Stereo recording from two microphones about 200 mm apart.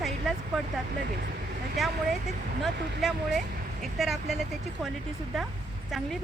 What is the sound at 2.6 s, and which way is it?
Speech, centre (ahead or behind).